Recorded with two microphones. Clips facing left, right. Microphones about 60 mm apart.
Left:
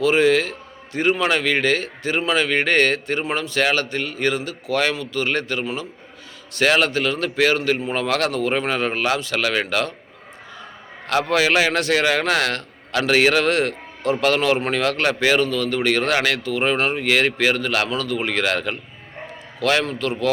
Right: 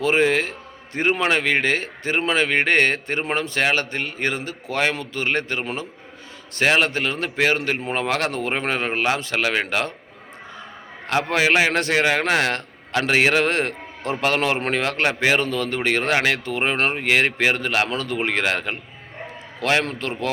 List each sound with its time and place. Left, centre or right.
0.0 s a man's voice: right
6.6 s a man's voice: right
11.0 s a man's voice: right